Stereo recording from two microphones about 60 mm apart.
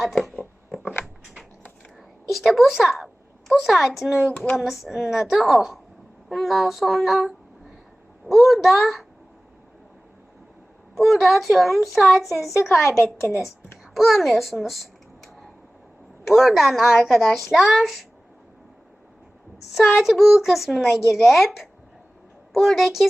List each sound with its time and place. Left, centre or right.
0.0 s speech: centre
1.0 s biting: centre
2.3 s a woman's voice: centre
10.9 s a woman's voice: centre
13.1 s a woman's voice: left
13.9 s a sound: centre
16.3 s a woman's voice: centre
19.7 s a woman's voice: centre
21.0 s speech: left
21.2 s a woman's voice: centre